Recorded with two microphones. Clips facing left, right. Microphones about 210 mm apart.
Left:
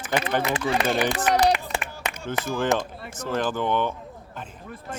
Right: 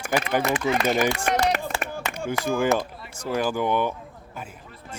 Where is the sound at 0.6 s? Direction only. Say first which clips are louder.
Even; 30° left (ahead or behind).